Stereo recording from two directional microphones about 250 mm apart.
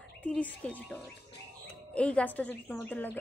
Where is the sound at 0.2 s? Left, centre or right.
Centre.